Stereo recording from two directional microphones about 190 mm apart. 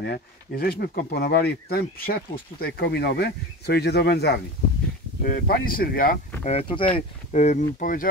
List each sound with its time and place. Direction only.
0.0 s speech: 55° left (ahead or behind)
6.4 s speech: 30° left (ahead or behind); by 8.1 s 45° left (ahead or behind)